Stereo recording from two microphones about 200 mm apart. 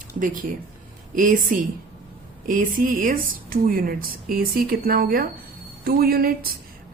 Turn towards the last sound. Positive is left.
turn(degrees=-50)  # may be behind; listen again after turning